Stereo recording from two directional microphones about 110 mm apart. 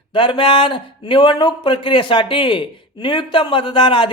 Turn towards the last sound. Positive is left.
turn(degrees=50)  # may be behind; listen again after turning